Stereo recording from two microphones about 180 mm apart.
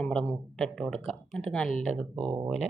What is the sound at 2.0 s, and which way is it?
Speech, 30° right (ahead or behind).